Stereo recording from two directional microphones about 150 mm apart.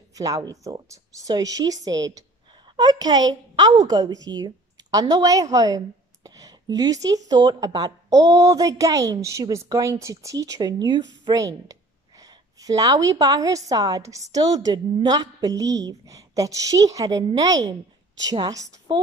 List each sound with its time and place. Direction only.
0.1 s speech: 25° right (ahead or behind)